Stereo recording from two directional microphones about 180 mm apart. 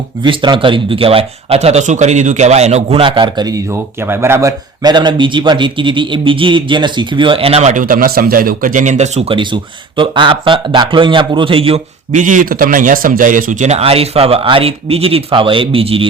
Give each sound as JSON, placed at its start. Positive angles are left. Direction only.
{"t": 0.2, "sound": "speech", "side_deg": -25}
{"t": 12.2, "sound": "speech", "side_deg": -45}